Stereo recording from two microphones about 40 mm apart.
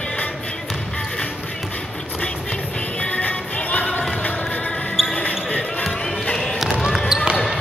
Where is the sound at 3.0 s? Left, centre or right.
Left.